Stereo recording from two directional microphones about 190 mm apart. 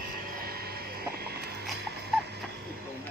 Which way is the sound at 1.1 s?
55° right (ahead or behind).